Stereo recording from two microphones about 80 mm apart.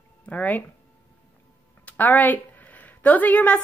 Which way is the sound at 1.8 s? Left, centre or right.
Left.